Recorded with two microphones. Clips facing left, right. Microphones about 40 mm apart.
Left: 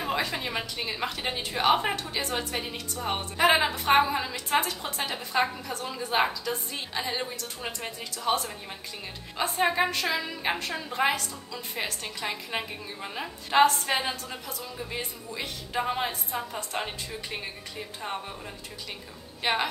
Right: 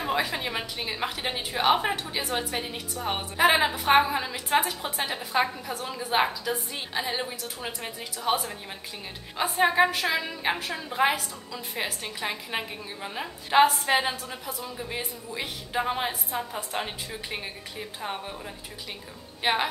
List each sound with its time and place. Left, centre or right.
0.0 s a woman's voice: centre
13.0 s a woman's voice: centre
13.5 s a woman's voice: centre
19.4 s a woman's voice: centre